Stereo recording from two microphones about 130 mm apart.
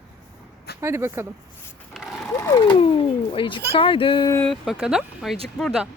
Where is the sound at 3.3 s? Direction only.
40° left (ahead or behind).